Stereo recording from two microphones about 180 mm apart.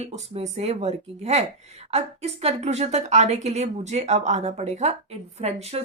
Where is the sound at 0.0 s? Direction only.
35° right (ahead or behind).